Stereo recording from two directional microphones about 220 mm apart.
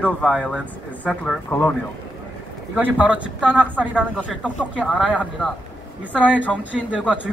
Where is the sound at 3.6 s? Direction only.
5° left (ahead or behind).